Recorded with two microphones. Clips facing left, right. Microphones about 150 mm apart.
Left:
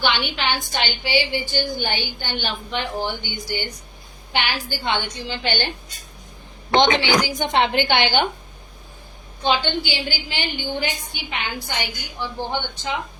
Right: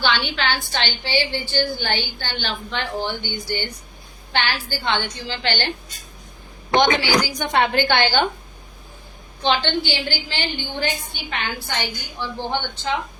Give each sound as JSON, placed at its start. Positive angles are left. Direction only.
{"t": 0.0, "sound": "a woman's voice", "side_deg": 15}
{"t": 6.7, "sound": "speech", "side_deg": 20}
{"t": 9.4, "sound": "a woman's voice", "side_deg": 10}